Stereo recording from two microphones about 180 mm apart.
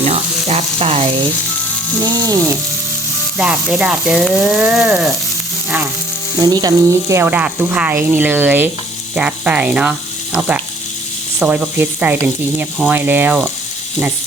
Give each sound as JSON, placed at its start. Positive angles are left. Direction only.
{"t": 0.0, "sound": "frying", "side_deg": -35}
{"t": 2.1, "sound": "frying", "side_deg": -20}
{"t": 3.3, "sound": "frying", "side_deg": -5}
{"t": 6.4, "sound": "speech", "side_deg": -20}